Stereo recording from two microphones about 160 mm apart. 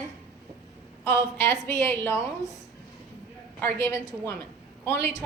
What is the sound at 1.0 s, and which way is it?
Speech, 15° left (ahead or behind).